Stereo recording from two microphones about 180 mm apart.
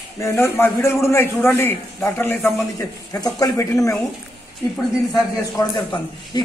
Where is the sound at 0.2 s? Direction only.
15° left (ahead or behind).